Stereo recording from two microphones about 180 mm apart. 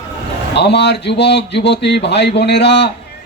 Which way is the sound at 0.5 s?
70° left (ahead or behind).